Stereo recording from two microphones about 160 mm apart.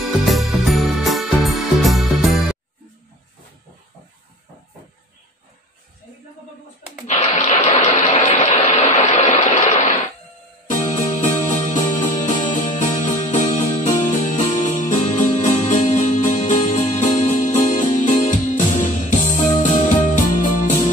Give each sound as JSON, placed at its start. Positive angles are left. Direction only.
{"t": 0.2, "sound": "music", "side_deg": 0}
{"t": 7.1, "sound": "a sound", "side_deg": 50}
{"t": 10.7, "sound": "music", "side_deg": 50}